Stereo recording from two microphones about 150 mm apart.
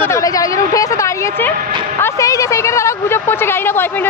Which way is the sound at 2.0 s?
20° left (ahead or behind).